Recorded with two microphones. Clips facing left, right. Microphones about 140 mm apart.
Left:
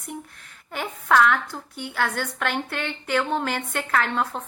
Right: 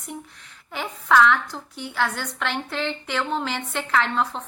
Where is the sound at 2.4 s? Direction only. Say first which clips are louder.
Right 3 dB; 55° left (ahead or behind).